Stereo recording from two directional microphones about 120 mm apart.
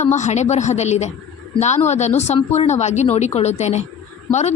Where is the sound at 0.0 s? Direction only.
75° left (ahead or behind).